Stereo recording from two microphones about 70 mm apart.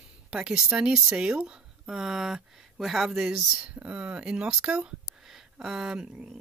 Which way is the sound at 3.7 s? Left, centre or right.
Centre.